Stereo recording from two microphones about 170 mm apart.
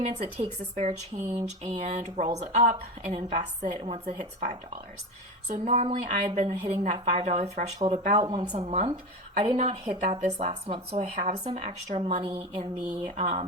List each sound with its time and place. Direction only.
0.0 s a woman's voice: 40° right (ahead or behind)
8.5 s a woman's voice: 40° right (ahead or behind)